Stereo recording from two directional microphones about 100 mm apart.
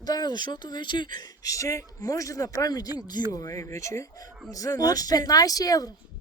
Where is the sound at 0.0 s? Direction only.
40° left (ahead or behind).